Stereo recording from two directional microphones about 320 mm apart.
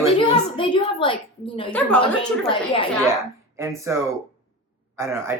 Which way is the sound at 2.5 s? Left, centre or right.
Centre.